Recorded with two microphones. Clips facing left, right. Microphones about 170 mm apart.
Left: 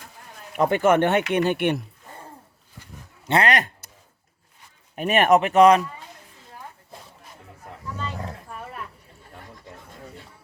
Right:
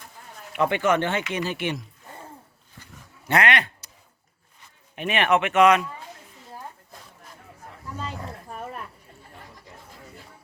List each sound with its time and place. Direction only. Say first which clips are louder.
0.5 s speech: left 3 dB; 40° left (ahead or behind); by 1.8 s 60° left (ahead or behind)
3.2 s speech: left 1 dB; 30° left (ahead or behind)
3.5 s speech: left 2 dB; 45° left (ahead or behind)
4.9 s speech: left 4 dB; 45° left (ahead or behind)